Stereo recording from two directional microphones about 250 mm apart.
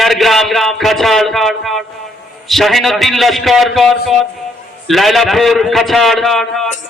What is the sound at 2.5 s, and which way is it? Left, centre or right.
A man's voice, centre.